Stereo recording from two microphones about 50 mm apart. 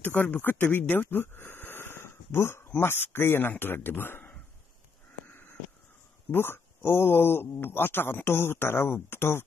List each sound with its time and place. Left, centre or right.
0.0 s speech: left
5.3 s crow: left
6.3 s speech: left